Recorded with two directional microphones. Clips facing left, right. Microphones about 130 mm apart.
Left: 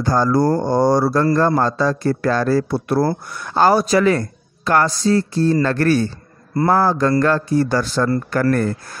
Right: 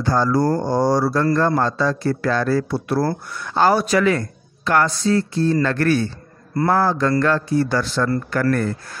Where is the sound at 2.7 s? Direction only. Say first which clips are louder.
Left 2 dB; 50° left (ahead or behind).